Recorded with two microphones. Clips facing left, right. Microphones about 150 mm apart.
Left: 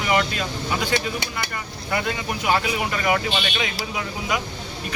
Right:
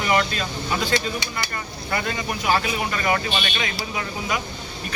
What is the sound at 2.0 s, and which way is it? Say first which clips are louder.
Speech: right 1 dB; 15° left (ahead or behind).